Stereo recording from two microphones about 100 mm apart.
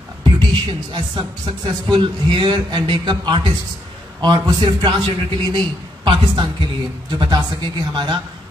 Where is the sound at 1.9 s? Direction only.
50° right (ahead or behind).